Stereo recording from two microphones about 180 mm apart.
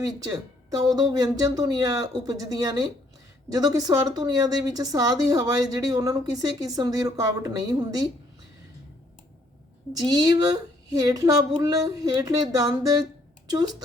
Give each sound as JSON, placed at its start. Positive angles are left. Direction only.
{"t": 0.0, "sound": "a woman's voice", "side_deg": -20}
{"t": 10.1, "sound": "a woman's voice", "side_deg": -20}